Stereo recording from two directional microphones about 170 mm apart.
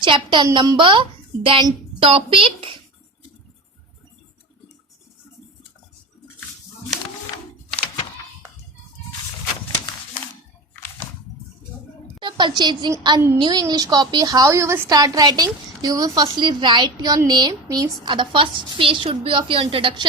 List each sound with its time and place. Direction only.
0.0 s a woman's voice: 25° right (ahead or behind)
12.2 s a woman's voice: 25° right (ahead or behind)